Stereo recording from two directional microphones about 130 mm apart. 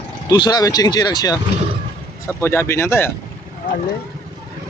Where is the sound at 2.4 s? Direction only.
20° left (ahead or behind).